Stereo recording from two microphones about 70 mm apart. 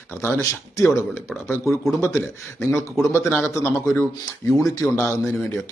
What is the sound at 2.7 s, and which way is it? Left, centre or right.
A man's voice, left.